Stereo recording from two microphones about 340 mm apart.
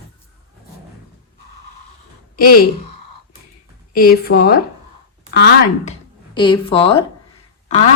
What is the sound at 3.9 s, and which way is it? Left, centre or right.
A woman's voice, left.